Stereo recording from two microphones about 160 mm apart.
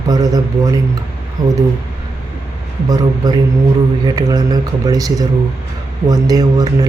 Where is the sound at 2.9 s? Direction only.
25° right (ahead or behind).